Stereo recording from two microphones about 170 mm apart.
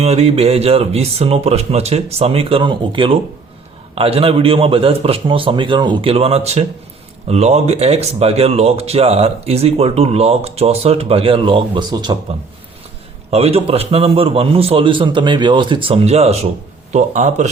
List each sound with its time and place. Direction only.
0.0 s speech: 35° right (ahead or behind)
13.3 s a man's voice: 35° right (ahead or behind)